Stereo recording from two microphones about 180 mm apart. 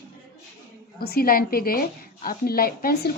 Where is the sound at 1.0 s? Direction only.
60° left (ahead or behind).